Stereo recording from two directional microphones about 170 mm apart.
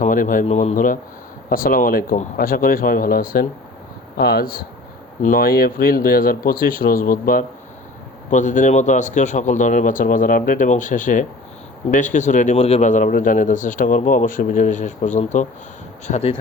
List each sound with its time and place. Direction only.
0.0 s a man's voice: 50° left (ahead or behind)
0.4 s speech: 40° left (ahead or behind)
1.5 s speech: 55° left (ahead or behind); by 16.4 s 40° left (ahead or behind)